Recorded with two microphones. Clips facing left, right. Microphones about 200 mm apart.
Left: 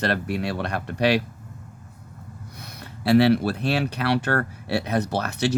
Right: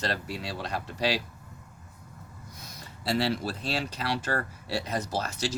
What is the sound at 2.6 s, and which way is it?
Speech, 65° left (ahead or behind).